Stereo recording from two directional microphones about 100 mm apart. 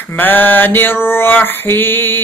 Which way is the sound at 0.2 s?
20° left (ahead or behind).